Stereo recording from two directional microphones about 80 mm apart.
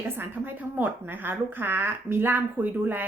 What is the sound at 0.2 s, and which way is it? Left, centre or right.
Speech, right.